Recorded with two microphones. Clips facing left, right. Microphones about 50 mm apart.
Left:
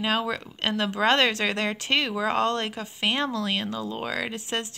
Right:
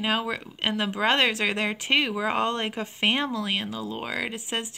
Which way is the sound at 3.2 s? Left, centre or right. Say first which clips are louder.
Left 1 dB; centre.